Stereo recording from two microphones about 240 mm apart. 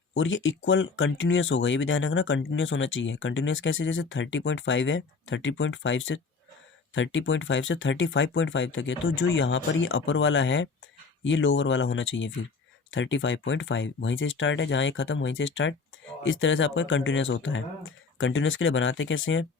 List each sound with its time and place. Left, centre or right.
0.1 s speech: left